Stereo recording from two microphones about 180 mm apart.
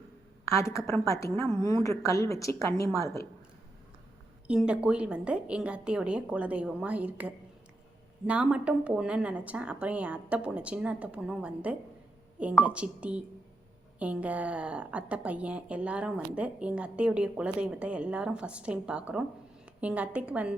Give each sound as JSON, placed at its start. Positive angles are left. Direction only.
{"t": 0.4, "sound": "a woman's voice", "side_deg": 15}
{"t": 4.4, "sound": "a woman's voice", "side_deg": -5}